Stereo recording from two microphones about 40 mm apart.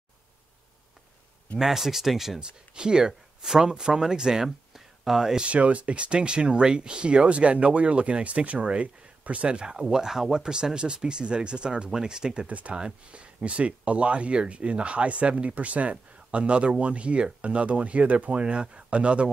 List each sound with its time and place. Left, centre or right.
1.6 s speech: centre
2.7 s speech: right
4.5 s a sound: centre
5.4 s speech: right
9.8 s speech: centre
12.4 s speech: right
12.7 s speech: right
18.4 s speech: right